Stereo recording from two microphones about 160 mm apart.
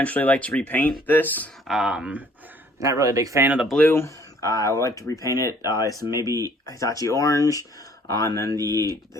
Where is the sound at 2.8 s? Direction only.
20° right (ahead or behind).